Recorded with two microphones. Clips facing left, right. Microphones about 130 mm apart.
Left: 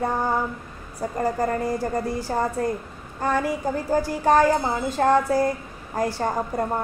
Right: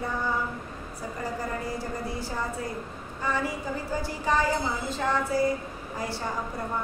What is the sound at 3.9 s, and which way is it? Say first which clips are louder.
A woman's voice: left 9 dB; 50° left (ahead or behind).